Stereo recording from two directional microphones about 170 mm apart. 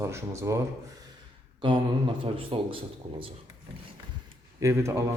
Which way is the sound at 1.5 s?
30° right (ahead or behind).